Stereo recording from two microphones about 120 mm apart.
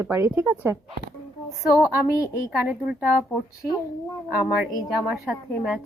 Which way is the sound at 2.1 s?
25° left (ahead or behind).